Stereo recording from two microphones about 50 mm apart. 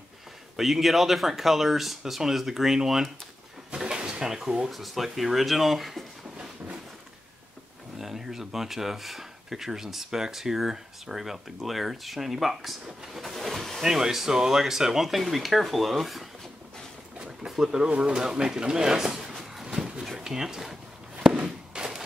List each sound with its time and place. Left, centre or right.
0.6 s speech: centre
3.7 s drawer open or close: centre
4.6 s speech: centre
8.0 s speech: centre
13.2 s a sound: centre
13.8 s speech: centre
17.5 s speech: centre
19.4 s a sound: centre
21.2 s walk: centre
21.7 s a sound: centre